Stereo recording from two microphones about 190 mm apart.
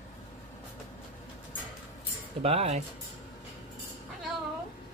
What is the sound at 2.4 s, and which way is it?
Speech, 30° right (ahead or behind).